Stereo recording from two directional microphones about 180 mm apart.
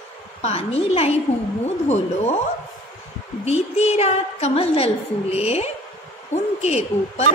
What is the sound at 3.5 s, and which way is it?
A woman's voice, 35° left (ahead or behind).